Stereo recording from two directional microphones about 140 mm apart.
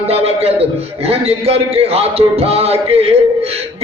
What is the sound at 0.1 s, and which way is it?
A man's voice, 45° right (ahead or behind).